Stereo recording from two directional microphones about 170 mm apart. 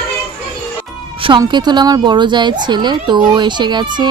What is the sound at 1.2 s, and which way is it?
A woman's voice, 30° right (ahead or behind).